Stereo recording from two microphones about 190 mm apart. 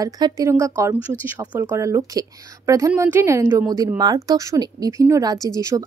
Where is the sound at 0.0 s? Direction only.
20° right (ahead or behind).